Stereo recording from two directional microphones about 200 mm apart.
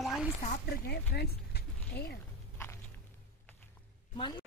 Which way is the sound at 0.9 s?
55° left (ahead or behind).